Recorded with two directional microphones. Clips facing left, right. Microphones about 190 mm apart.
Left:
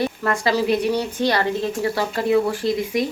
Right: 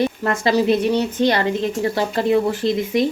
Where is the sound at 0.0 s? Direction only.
25° right (ahead or behind).